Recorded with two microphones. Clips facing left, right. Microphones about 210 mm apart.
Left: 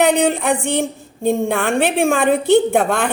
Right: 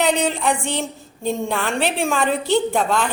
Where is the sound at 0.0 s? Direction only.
55° left (ahead or behind).